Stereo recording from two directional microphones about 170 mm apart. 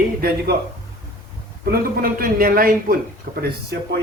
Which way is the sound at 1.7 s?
55° right (ahead or behind).